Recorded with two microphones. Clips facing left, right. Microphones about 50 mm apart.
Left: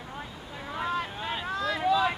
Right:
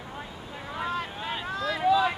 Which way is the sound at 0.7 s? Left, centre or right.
Centre.